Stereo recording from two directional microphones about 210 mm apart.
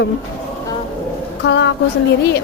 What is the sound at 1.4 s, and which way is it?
Speech, 55° left (ahead or behind).